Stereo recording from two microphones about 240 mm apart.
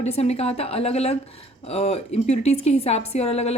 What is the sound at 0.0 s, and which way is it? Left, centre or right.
A woman's voice, left.